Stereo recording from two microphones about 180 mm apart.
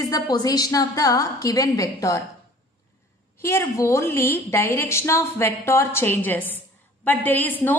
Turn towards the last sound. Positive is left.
turn(degrees=10)  # may be behind; listen again after turning